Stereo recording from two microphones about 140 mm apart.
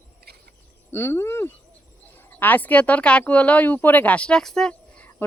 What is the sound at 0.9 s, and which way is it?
Speech, 15° left (ahead or behind).